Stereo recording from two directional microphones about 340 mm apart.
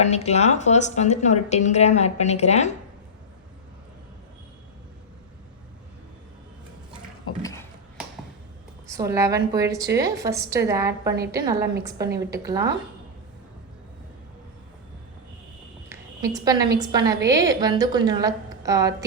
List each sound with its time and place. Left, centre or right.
0.0 s a woman's voice: centre
8.9 s a woman's voice: centre
15.9 s a sound: centre
16.9 s a woman's voice: centre